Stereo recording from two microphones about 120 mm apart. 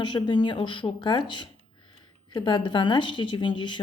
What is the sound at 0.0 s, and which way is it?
Speech, 40° left (ahead or behind).